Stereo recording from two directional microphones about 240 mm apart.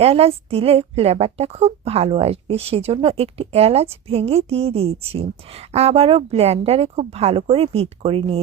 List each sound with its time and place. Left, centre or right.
0.0 s a woman's voice: right